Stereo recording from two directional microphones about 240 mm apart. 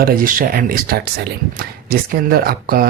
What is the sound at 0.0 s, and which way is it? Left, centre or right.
Speech, right.